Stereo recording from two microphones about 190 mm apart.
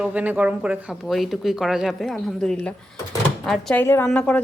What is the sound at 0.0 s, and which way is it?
Speech, 10° right (ahead or behind).